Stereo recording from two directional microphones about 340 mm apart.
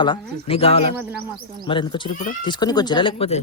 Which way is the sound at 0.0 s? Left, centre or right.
Centre.